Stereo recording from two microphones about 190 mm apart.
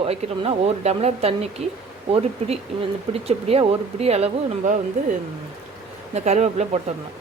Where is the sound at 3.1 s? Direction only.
30° right (ahead or behind).